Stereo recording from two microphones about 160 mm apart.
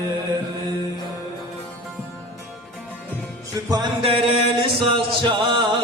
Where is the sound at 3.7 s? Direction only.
30° right (ahead or behind).